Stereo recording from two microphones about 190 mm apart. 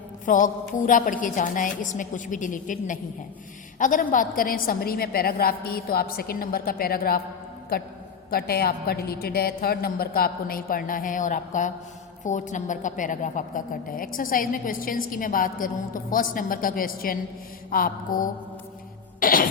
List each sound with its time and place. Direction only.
0.3 s a woman's voice: 45° left (ahead or behind)
8.3 s a woman's voice: 55° left (ahead or behind)